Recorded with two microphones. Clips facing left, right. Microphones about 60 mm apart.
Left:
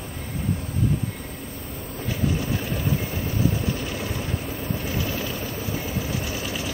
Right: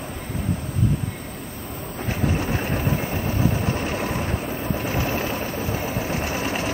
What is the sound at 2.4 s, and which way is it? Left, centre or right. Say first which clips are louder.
Vehicle: right 3 dB; right.